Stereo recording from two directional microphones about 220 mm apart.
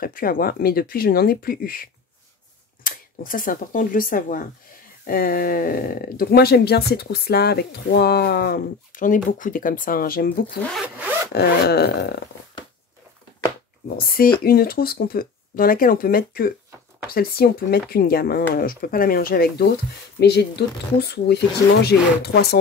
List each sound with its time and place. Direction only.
0.0 s speech: 40° left (ahead or behind)
14.0 s speech: 40° left (ahead or behind)